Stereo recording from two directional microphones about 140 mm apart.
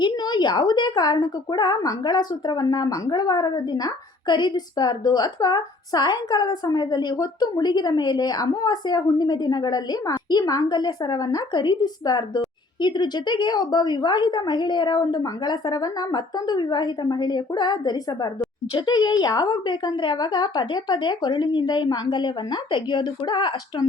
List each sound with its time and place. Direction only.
0.0 s a woman's voice: 30° left (ahead or behind)